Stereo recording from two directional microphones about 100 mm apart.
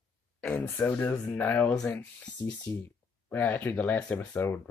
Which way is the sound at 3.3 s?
20° left (ahead or behind).